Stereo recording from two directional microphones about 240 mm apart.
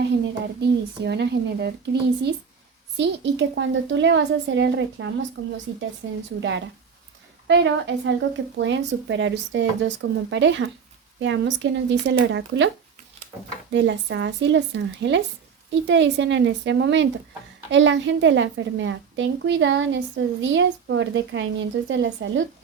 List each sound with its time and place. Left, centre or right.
0.6 s a woman's voice: right
7.4 s a woman's voice: right